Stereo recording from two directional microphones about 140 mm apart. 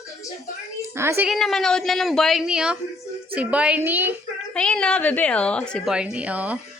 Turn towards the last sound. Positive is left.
turn(degrees=-10)  # may be behind; listen again after turning